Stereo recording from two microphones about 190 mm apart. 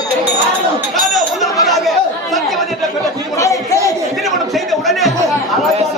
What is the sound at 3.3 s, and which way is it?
Chatter, 15° left (ahead or behind).